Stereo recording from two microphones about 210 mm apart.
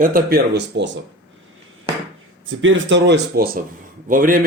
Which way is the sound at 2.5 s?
65° right (ahead or behind).